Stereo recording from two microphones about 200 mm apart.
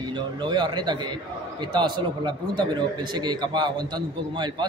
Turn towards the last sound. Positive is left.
turn(degrees=-20)  # may be behind; listen again after turning